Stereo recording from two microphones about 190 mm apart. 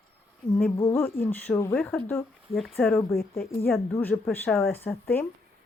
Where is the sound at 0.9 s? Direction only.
10° left (ahead or behind).